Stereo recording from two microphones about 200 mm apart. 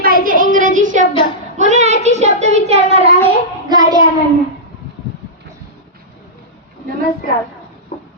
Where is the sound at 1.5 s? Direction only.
35° right (ahead or behind).